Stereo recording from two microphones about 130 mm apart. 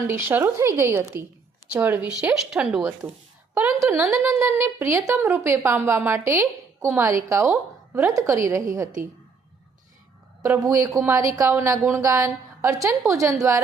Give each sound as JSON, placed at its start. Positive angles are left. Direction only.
{"t": 0.1, "sound": "a woman's voice", "side_deg": -20}
{"t": 3.5, "sound": "a woman's voice", "side_deg": -20}
{"t": 10.4, "sound": "a woman's voice", "side_deg": -20}